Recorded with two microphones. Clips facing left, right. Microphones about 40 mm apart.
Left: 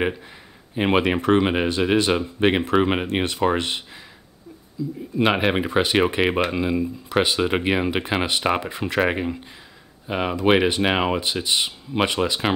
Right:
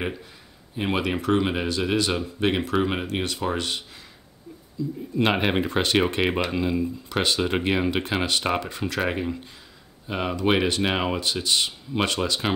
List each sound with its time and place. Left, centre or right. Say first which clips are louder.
0.7 s speech: left 6 dB; left
4.8 s speech: left 2 dB; centre